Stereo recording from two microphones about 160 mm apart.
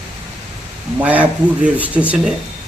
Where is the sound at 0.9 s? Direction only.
10° right (ahead or behind).